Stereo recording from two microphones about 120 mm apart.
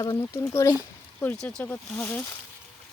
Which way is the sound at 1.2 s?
10° left (ahead or behind).